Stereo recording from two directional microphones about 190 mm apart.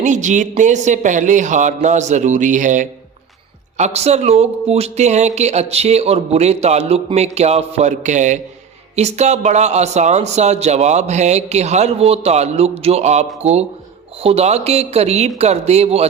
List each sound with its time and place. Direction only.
0.0 s speech: 40° right (ahead or behind)